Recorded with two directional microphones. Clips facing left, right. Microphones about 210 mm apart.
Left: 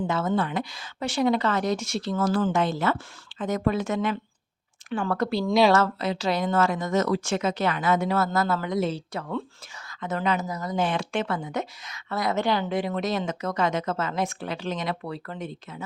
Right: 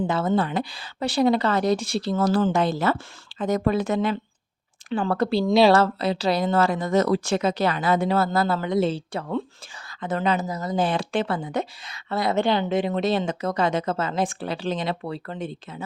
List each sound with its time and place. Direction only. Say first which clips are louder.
0.1 s speech: right 3 dB; 30° right (ahead or behind)